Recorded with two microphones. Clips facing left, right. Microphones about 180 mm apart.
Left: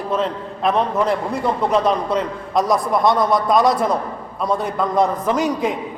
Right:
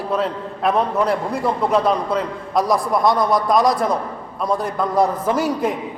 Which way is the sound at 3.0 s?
25° left (ahead or behind).